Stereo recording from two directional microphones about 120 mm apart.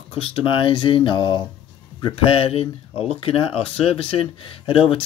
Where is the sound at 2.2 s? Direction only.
50° left (ahead or behind).